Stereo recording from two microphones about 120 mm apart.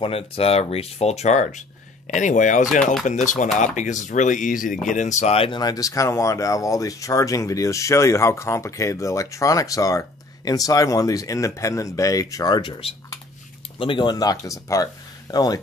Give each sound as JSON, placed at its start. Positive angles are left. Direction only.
{"t": 0.0, "sound": "speech", "side_deg": 50}
{"t": 2.8, "sound": "speech", "side_deg": 0}
{"t": 3.1, "sound": "speech", "side_deg": 90}
{"t": 5.5, "sound": "speech", "side_deg": 35}